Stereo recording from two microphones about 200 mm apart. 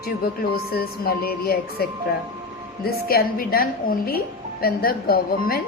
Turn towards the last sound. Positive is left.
turn(degrees=50)  # may be behind; listen again after turning